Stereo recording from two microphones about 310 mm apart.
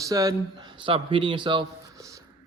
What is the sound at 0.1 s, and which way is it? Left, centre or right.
A man's voice, centre.